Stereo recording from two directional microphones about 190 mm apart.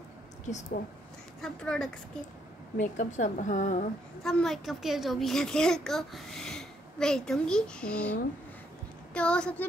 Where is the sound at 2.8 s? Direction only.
40° left (ahead or behind).